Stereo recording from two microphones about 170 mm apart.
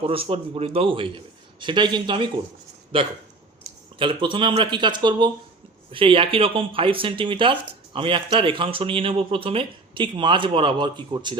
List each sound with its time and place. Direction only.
0.0 s speech: 35° right (ahead or behind)